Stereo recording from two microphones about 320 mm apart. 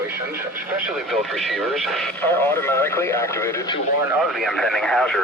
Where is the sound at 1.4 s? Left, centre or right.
Centre.